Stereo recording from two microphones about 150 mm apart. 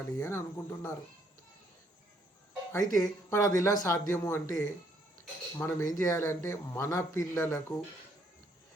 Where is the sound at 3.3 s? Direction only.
20° left (ahead or behind).